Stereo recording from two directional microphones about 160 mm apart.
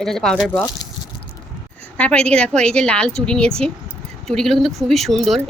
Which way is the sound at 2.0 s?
5° left (ahead or behind).